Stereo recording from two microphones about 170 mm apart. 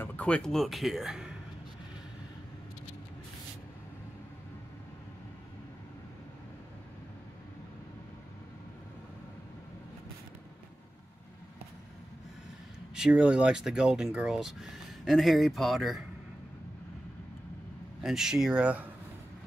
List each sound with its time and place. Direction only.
0.0 s speech: 10° left (ahead or behind)
12.9 s speech: 5° right (ahead or behind)
18.0 s speech: 5° right (ahead or behind)